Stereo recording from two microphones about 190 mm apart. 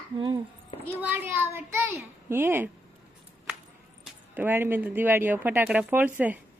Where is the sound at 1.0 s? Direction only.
10° right (ahead or behind).